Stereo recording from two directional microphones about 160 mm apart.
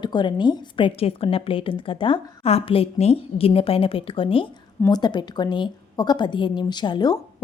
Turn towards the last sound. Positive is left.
turn(degrees=25)  # may be behind; listen again after turning